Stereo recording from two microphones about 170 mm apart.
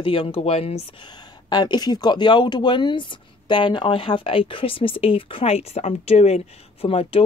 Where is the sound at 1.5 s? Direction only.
25° left (ahead or behind).